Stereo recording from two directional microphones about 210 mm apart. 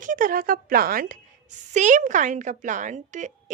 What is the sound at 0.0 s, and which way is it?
Speech, 40° right (ahead or behind).